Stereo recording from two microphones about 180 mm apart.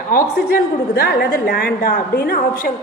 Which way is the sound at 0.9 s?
55° left (ahead or behind).